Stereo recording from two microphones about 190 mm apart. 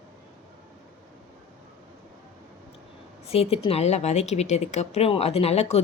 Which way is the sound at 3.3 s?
30° left (ahead or behind).